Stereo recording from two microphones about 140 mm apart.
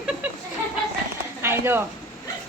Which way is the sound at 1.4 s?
15° right (ahead or behind).